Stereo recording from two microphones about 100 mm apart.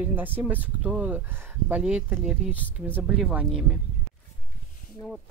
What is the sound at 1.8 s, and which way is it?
Speech, 10° right (ahead or behind).